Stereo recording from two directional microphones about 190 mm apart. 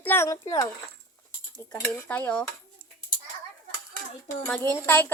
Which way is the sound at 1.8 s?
10° left (ahead or behind).